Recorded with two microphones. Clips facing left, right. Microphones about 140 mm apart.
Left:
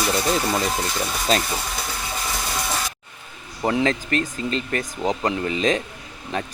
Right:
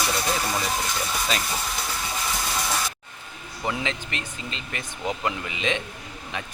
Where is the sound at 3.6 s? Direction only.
45° left (ahead or behind).